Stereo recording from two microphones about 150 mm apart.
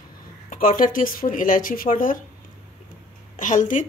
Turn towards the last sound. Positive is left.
turn(degrees=60)  # may be behind; listen again after turning